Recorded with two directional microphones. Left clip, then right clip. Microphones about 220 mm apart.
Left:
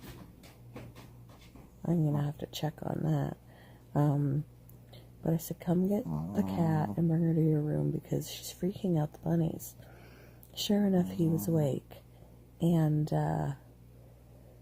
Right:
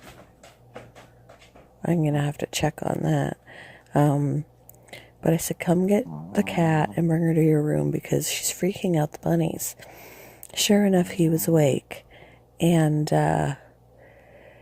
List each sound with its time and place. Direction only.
1.8 s speech: 30° right (ahead or behind)